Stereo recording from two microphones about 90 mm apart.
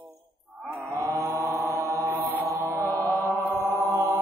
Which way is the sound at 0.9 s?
35° right (ahead or behind).